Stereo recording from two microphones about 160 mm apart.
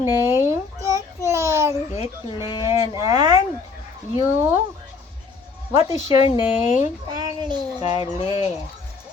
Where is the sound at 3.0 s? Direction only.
25° right (ahead or behind).